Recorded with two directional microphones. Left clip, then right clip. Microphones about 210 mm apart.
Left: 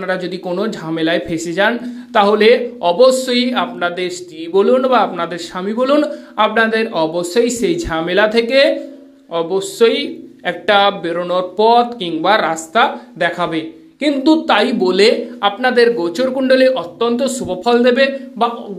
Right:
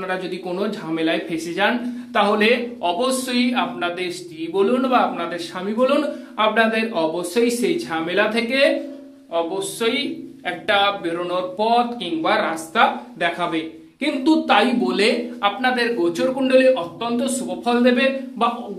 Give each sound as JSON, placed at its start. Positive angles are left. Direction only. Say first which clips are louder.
{"t": 0.0, "sound": "a man's voice", "louder": "left 5 dB", "side_deg": 30}